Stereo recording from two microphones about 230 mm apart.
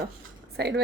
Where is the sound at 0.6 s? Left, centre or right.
Right.